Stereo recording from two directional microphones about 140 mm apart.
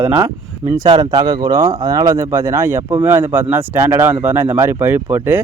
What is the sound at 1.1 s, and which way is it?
Speech, 25° right (ahead or behind).